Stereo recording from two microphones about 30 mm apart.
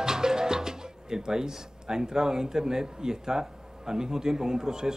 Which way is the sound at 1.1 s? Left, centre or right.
Right.